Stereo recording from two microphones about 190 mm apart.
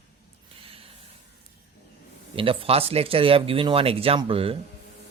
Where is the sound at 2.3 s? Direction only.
30° right (ahead or behind).